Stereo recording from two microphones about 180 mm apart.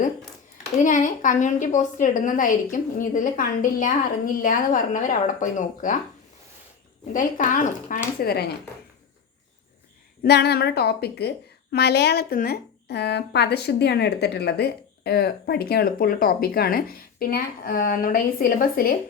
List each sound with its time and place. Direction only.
0.9 s a woman's voice: 45° left (ahead or behind)
7.1 s a woman's voice: 45° left (ahead or behind)
8.2 s a woman's voice: 60° left (ahead or behind)
10.2 s a woman's voice: 65° left (ahead or behind)